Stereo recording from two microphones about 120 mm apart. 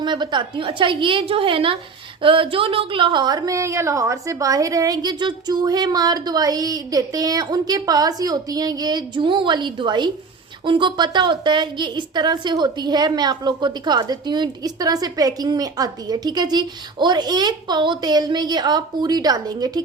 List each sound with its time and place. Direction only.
0.0 s a woman's voice: 40° right (ahead or behind)